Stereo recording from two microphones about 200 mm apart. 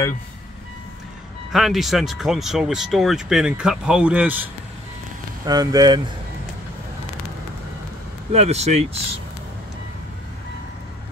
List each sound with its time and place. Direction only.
1.5 s speech: centre (ahead or behind)
5.4 s speech: 20° right (ahead or behind)
8.3 s speech: 30° right (ahead or behind)